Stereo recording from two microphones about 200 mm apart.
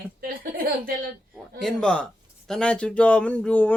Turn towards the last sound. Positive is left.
turn(degrees=5)  # may be behind; listen again after turning